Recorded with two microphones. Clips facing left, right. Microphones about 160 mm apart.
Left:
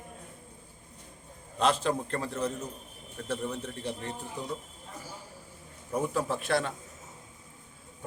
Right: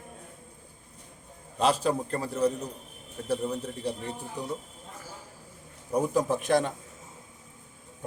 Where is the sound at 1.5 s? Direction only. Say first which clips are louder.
Right 2 dB; 35° right (ahead or behind).